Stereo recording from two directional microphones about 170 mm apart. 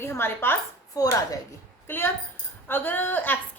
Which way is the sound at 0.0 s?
15° left (ahead or behind).